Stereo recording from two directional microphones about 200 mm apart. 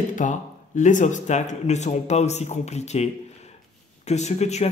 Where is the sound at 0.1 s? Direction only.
40° left (ahead or behind).